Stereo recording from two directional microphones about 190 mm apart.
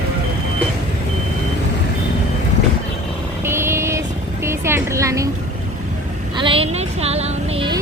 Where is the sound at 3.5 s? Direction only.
15° right (ahead or behind).